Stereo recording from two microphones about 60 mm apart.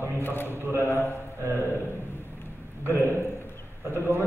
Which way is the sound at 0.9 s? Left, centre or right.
Right.